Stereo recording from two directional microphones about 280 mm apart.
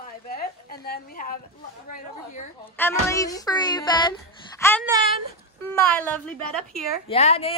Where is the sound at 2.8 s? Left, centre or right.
Centre.